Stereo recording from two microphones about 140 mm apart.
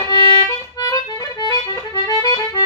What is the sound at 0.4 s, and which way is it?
Music, 25° left (ahead or behind).